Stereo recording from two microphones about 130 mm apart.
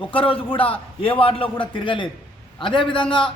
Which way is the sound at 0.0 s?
45° left (ahead or behind).